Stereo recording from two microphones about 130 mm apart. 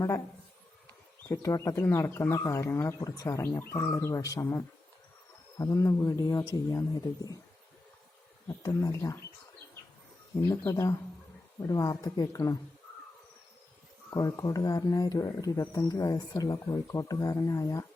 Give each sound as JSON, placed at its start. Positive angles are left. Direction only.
{"t": 1.3, "sound": "speech", "side_deg": 25}
{"t": 8.4, "sound": "speech", "side_deg": 25}
{"t": 10.3, "sound": "speech", "side_deg": 25}
{"t": 14.1, "sound": "speech", "side_deg": 25}